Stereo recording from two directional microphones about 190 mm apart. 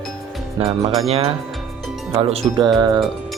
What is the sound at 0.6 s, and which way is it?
Speech, 30° right (ahead or behind).